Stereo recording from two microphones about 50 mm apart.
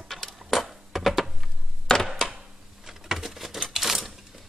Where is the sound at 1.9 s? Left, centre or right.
Centre.